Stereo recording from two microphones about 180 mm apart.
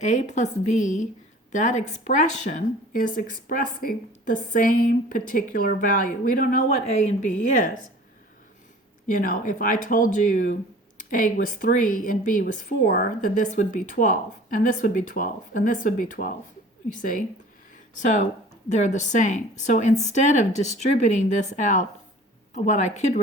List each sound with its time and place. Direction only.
0.0 s speech: 40° left (ahead or behind)
9.0 s speech: 50° left (ahead or behind)